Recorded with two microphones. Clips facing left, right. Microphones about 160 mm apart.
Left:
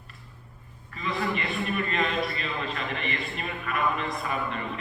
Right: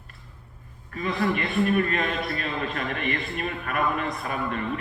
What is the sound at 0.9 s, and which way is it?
A man's voice, 50° right (ahead or behind).